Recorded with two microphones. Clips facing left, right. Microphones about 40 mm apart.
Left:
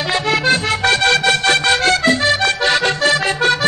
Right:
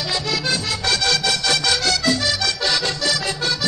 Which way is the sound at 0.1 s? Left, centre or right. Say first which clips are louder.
Left 8 dB; left.